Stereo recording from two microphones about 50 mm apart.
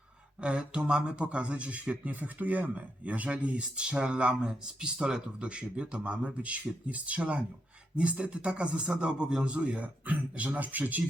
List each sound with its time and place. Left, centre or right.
0.4 s speech: centre